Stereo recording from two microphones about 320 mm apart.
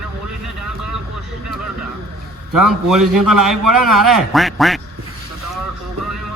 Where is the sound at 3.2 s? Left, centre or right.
Right.